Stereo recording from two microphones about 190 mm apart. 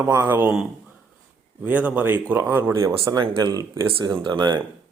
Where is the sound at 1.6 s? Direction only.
10° right (ahead or behind); by 4.6 s 25° right (ahead or behind).